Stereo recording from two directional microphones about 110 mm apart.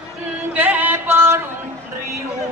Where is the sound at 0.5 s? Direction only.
15° right (ahead or behind).